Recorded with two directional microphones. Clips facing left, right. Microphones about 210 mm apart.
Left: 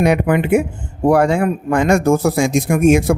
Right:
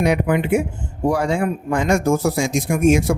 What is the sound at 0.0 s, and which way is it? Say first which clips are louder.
A man's voice: left 3 dB; 60° left (ahead or behind).